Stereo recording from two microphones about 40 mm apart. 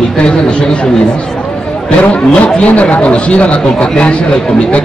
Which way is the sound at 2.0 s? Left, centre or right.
Left.